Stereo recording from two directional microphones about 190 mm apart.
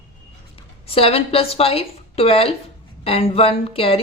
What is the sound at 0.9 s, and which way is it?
Speech, 30° left (ahead or behind).